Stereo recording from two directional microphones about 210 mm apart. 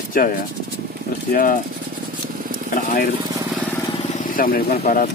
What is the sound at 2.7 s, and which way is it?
Speech, 40° left (ahead or behind).